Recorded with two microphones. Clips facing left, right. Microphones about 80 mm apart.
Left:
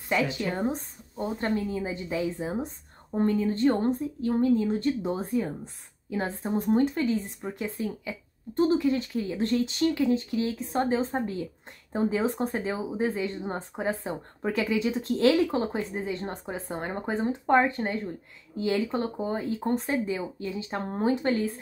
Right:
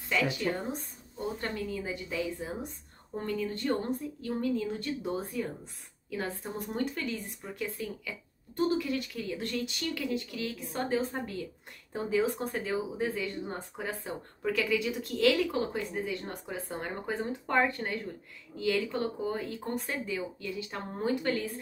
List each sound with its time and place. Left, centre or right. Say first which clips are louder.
0.1 s speech: left 3 dB; left